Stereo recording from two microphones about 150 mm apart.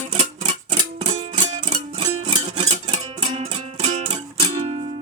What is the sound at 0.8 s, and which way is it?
Music, 30° right (ahead or behind).